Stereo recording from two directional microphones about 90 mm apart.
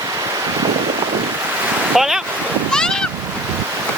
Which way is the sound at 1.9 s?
5° right (ahead or behind).